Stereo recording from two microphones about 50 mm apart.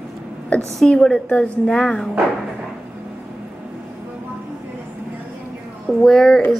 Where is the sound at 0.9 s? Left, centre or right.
Centre.